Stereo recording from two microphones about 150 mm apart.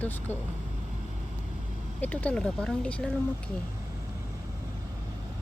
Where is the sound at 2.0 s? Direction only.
10° left (ahead or behind).